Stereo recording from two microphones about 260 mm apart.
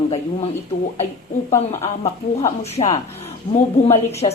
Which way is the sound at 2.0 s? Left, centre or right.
Left.